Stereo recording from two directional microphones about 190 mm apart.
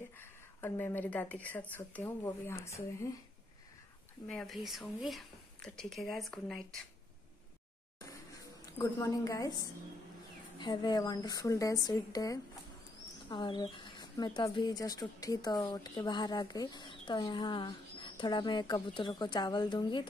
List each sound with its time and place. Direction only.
0.2 s speech: 10° left (ahead or behind)
4.3 s speech: centre (ahead or behind)
8.7 s speech: 15° left (ahead or behind)